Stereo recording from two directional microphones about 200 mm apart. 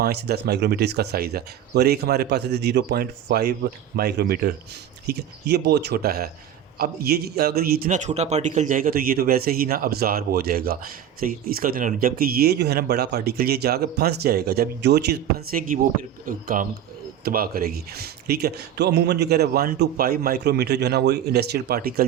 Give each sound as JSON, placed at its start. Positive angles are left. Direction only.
{"t": 0.0, "sound": "a man's voice", "side_deg": -55}